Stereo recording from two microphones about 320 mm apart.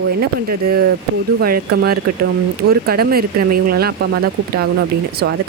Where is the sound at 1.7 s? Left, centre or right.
Right.